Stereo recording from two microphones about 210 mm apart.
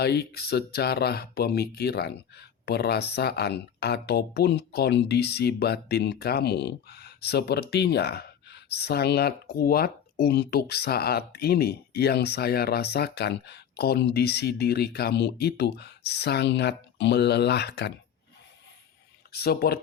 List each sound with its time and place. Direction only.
0.0 s speech: 50° left (ahead or behind)
19.3 s speech: 50° left (ahead or behind)